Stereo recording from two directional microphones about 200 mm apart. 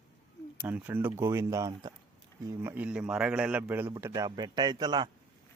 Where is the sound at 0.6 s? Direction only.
10° right (ahead or behind).